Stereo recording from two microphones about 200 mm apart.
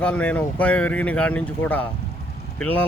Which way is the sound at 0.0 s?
5° left (ahead or behind).